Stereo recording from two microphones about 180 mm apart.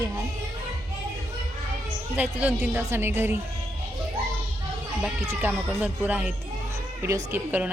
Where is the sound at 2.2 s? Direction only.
10° right (ahead or behind).